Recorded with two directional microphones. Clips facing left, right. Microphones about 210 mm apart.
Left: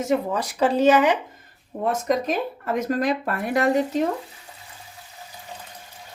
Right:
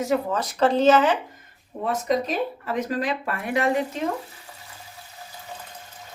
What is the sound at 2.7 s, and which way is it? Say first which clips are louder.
Speech: left 3 dB; 40° left (ahead or behind).